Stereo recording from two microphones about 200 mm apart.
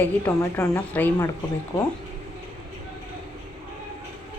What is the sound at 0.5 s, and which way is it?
Speech, 15° left (ahead or behind).